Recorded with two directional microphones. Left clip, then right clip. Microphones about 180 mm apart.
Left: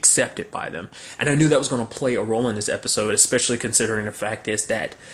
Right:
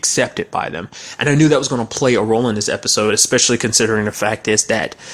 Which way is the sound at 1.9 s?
45° right (ahead or behind).